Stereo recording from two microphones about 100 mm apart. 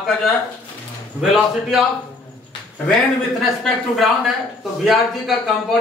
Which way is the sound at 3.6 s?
Centre (ahead or behind).